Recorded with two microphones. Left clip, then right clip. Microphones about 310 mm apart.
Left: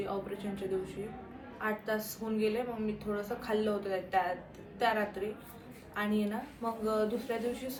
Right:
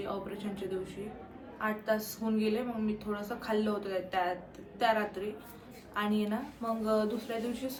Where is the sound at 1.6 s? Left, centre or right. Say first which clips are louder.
Right 2 dB; centre.